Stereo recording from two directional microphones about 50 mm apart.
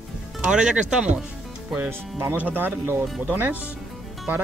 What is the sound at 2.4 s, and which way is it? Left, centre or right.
Speech, right.